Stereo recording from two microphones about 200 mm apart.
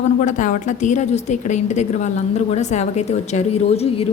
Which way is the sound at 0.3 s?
40° left (ahead or behind).